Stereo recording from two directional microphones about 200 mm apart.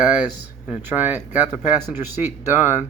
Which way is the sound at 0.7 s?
5° right (ahead or behind).